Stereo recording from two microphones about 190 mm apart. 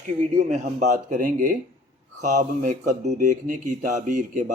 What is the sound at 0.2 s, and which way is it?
Speech, 40° right (ahead or behind).